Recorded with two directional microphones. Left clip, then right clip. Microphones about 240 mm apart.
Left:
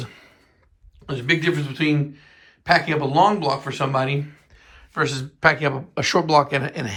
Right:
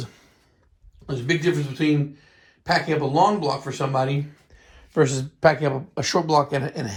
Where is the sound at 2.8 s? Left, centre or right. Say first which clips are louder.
Left 2 dB; centre.